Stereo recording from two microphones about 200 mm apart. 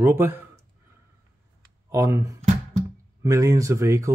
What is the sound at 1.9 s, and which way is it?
Speech, 15° right (ahead or behind).